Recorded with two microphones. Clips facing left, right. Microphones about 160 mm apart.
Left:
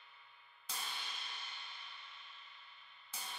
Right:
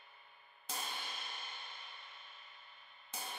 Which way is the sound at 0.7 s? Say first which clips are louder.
Right 3 dB; 45° right (ahead or behind).